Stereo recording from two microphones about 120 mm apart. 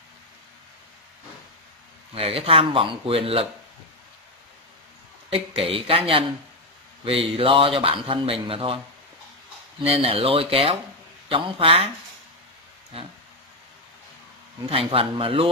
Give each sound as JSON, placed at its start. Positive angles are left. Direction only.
{"t": 2.1, "sound": "a man's voice", "side_deg": -50}
{"t": 5.3, "sound": "a man's voice", "side_deg": -50}
{"t": 9.8, "sound": "a man's voice", "side_deg": -55}
{"t": 14.7, "sound": "a man's voice", "side_deg": -50}